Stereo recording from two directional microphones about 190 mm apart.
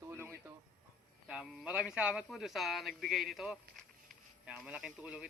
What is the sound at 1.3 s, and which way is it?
A man's voice, 5° right (ahead or behind).